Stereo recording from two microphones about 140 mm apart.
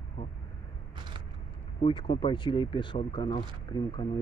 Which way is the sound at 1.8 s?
35° left (ahead or behind).